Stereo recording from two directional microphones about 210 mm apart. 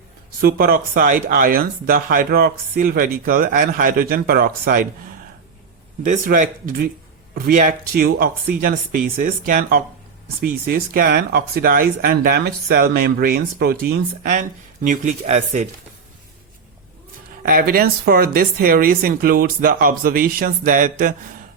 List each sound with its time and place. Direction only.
0.4 s speech: 45° right (ahead or behind)
6.1 s speech: 40° right (ahead or behind)
14.3 s speech: 35° right (ahead or behind)
17.5 s speech: 45° right (ahead or behind)